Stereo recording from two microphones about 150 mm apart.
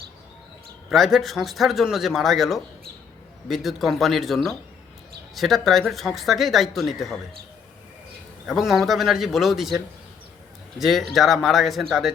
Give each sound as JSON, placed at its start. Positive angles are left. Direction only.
{"t": 0.9, "sound": "speech", "side_deg": 0}
{"t": 8.4, "sound": "speech", "side_deg": 0}